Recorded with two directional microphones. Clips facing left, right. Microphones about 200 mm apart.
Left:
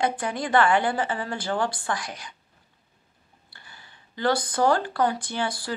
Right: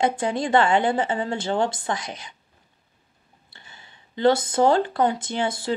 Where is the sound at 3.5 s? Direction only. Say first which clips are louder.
Right 1 dB; 20° right (ahead or behind).